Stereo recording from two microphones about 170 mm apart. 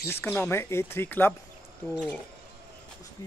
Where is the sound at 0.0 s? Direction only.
15° left (ahead or behind).